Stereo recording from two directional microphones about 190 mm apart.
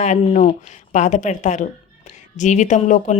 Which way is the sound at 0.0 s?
40° left (ahead or behind).